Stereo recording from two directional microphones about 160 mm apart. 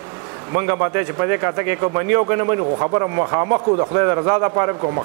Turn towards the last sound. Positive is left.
turn(degrees=-20)  # may be behind; listen again after turning